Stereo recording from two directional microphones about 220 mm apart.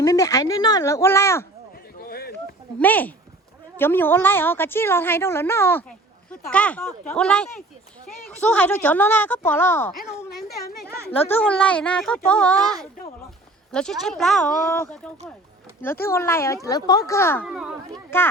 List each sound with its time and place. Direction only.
0.0 s a woman's voice: 15° left (ahead or behind)
2.0 s a sound: 45° left (ahead or behind)
2.7 s a woman's voice: 10° left (ahead or behind)
11.3 s a woman's voice: 10° left (ahead or behind)
17.4 s speech: 5° right (ahead or behind)
18.1 s a woman's voice: 10° left (ahead or behind)